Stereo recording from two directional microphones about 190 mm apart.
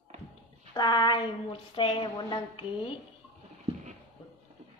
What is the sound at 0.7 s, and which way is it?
A woman's voice, 20° left (ahead or behind).